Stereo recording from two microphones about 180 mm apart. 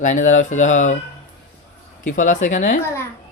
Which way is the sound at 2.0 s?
45° left (ahead or behind).